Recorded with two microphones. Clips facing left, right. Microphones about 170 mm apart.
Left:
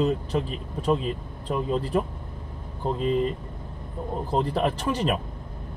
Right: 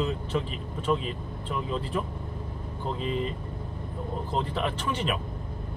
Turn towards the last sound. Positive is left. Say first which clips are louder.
# left 4 dB
turn(degrees=40)  # may be behind; listen again after turning